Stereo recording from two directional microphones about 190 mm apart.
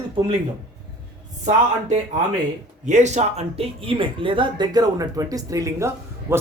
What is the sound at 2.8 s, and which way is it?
Speech, 40° right (ahead or behind).